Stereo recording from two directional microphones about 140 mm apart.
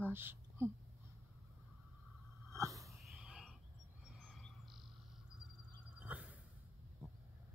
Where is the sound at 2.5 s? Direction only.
20° right (ahead or behind).